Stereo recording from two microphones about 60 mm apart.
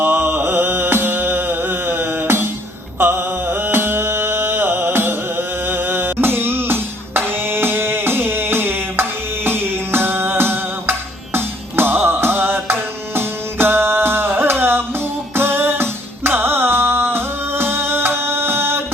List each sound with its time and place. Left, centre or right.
0.0 s music: right